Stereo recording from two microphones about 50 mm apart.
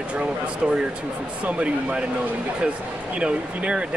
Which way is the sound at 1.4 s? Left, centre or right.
Right.